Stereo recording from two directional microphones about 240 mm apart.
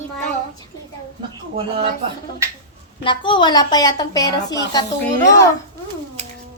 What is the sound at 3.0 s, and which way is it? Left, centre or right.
A woman's voice, centre.